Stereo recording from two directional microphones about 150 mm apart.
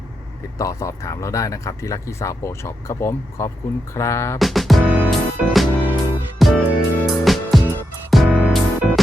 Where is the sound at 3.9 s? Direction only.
20° left (ahead or behind).